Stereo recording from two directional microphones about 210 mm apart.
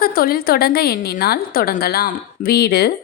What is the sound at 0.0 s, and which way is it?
A woman's voice, 45° left (ahead or behind).